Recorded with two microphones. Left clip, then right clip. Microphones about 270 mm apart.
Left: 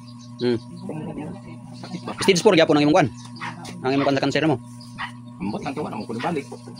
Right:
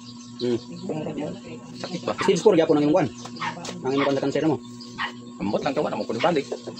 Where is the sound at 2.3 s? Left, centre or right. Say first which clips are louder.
Left 2 dB; left.